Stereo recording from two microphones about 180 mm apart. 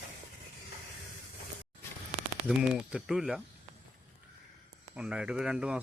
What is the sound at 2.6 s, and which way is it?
Speech, 5° right (ahead or behind).